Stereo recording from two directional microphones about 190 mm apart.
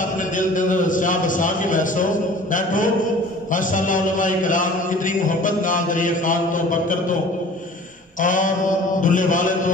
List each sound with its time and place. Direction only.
0.4 s a sound: 45° left (ahead or behind)
2.5 s mantra: 45° left (ahead or behind)
8.2 s mantra: 45° left (ahead or behind)